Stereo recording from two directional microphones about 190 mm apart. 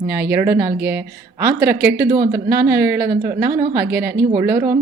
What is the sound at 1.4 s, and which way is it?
Speech, 10° right (ahead or behind).